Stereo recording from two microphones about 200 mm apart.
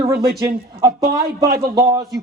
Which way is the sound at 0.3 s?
20° right (ahead or behind).